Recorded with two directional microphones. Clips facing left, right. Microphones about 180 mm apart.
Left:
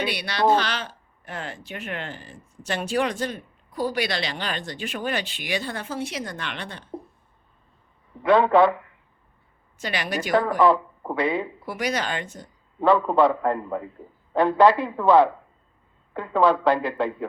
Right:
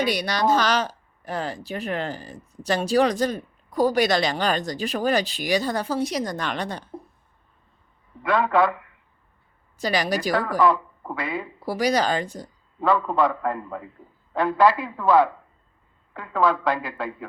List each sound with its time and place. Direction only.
0.0 s speech: 40° right (ahead or behind)
8.3 s speech: 25° left (ahead or behind)
9.7 s speech: 35° right (ahead or behind)
11.0 s speech: 20° left (ahead or behind)
11.6 s speech: 35° right (ahead or behind)
12.9 s speech: 20° left (ahead or behind)